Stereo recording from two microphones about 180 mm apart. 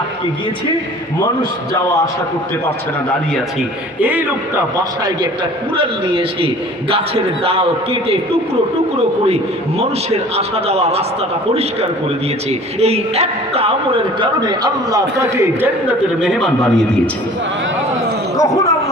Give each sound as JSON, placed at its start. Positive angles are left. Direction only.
{"t": 2.6, "sound": "a man's voice", "side_deg": 5}
{"t": 4.0, "sound": "a man's voice", "side_deg": -10}
{"t": 5.7, "sound": "a woman's voice", "side_deg": -30}
{"t": 9.2, "sound": "a man's voice", "side_deg": -35}
{"t": 12.5, "sound": "a woman's voice", "side_deg": -35}
{"t": 18.3, "sound": "a sound", "side_deg": 20}